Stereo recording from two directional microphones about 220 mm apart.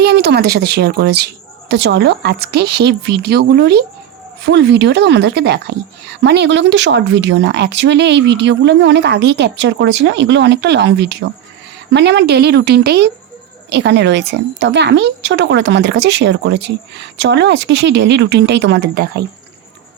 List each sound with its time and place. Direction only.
0.0 s a woman's voice: 50° right (ahead or behind)